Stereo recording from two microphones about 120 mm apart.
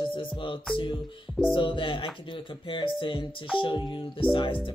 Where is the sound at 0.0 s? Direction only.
45° left (ahead or behind).